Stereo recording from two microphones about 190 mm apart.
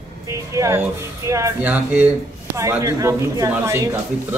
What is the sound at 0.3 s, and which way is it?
Speech, 15° right (ahead or behind).